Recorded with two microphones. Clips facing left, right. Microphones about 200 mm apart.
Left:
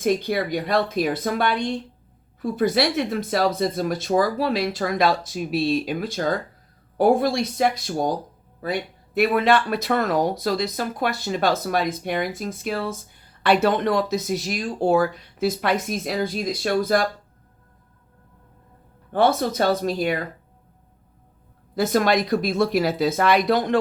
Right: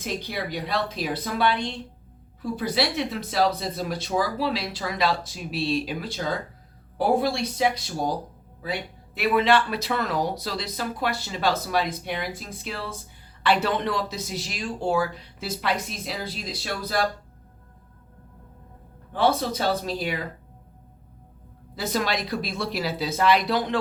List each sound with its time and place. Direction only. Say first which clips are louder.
0.0 s speech: left 9 dB; 50° left (ahead or behind)
19.1 s speech: left 3 dB; 50° left (ahead or behind)
21.8 s speech: left 7 dB; 50° left (ahead or behind)